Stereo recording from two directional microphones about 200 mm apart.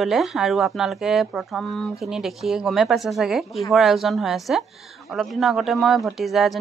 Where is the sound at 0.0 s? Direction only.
Centre (ahead or behind).